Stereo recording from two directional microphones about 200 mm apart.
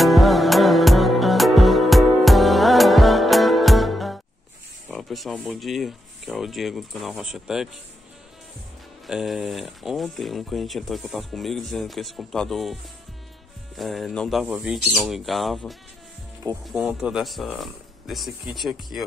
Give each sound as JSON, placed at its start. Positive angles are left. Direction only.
{"t": 0.0, "sound": "music", "side_deg": 0}
{"t": 4.9, "sound": "speech", "side_deg": 0}
{"t": 9.0, "sound": "speech", "side_deg": 0}
{"t": 13.7, "sound": "speech", "side_deg": 0}